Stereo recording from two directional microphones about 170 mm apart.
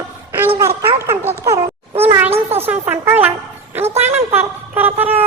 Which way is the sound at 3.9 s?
40° right (ahead or behind).